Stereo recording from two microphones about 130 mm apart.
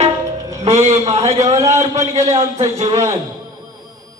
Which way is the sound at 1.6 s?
25° right (ahead or behind).